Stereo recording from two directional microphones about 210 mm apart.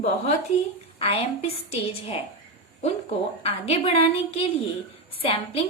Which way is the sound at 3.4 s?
30° left (ahead or behind).